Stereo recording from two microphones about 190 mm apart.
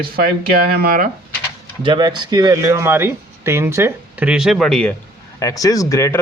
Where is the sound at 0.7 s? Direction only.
50° right (ahead or behind).